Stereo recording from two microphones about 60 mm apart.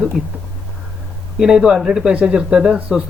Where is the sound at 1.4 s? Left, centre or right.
Centre.